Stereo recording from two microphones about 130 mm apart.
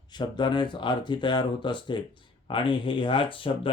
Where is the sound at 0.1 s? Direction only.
35° left (ahead or behind).